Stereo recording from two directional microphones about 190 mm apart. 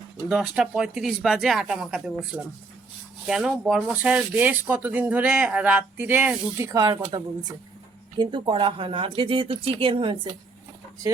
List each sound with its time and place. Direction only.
0.3 s speech: 5° right (ahead or behind)
6.7 s speech: 20° right (ahead or behind)
8.2 s speech: 25° right (ahead or behind)